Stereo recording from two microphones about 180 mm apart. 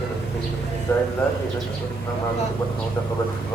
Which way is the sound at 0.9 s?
20° left (ahead or behind).